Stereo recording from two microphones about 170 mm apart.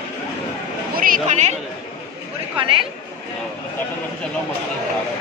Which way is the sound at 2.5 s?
30° right (ahead or behind).